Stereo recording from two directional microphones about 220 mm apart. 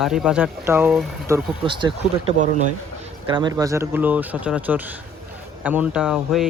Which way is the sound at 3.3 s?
20° right (ahead or behind).